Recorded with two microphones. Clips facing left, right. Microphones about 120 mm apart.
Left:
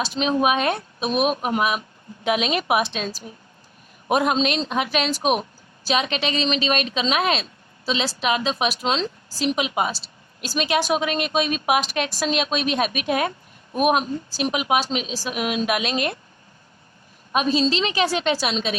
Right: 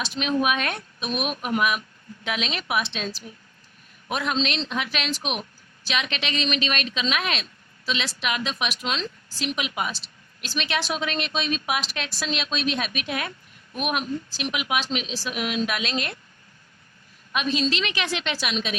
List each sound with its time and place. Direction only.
0.0 s a woman's voice: 30° left (ahead or behind)
11.0 s a woman's voice: 15° left (ahead or behind)
11.7 s a woman's voice: 50° left (ahead or behind)
15.5 s a woman's voice: 15° left (ahead or behind)
17.3 s a woman's voice: 35° left (ahead or behind)